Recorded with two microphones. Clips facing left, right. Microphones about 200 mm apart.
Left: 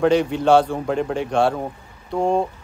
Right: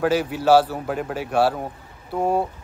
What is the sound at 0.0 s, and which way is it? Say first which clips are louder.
A man's voice: left 3 dB; 5° right (ahead or behind).